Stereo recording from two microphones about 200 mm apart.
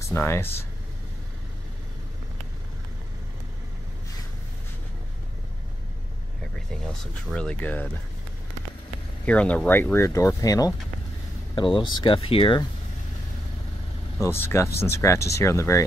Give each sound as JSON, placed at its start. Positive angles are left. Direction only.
{"t": 0.1, "sound": "speech", "side_deg": 10}
{"t": 6.9, "sound": "speech", "side_deg": 5}
{"t": 9.2, "sound": "speech", "side_deg": 5}
{"t": 14.2, "sound": "speech", "side_deg": 10}